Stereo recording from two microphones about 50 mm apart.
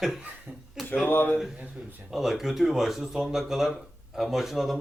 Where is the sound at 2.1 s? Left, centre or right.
Centre.